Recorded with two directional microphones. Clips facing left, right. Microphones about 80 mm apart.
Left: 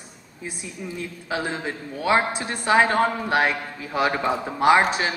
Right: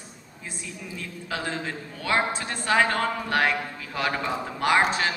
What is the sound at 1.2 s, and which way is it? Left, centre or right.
A woman's voice, centre.